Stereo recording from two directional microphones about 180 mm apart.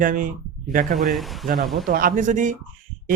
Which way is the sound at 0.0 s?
50° right (ahead or behind).